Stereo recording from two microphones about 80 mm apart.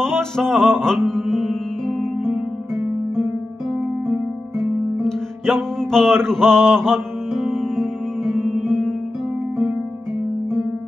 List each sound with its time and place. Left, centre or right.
0.0 s music: centre
2.2 s music: right
4.9 s music: centre